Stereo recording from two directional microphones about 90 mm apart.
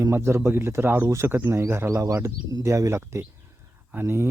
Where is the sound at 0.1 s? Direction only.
30° right (ahead or behind).